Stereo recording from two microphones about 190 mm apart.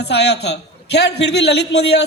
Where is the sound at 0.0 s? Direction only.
60° left (ahead or behind).